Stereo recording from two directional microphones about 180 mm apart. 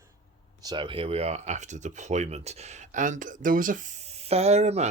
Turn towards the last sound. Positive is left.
turn(degrees=-35)  # may be behind; listen again after turning